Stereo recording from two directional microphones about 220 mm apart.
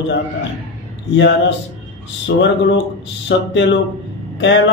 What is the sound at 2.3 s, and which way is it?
Speech, 65° left (ahead or behind).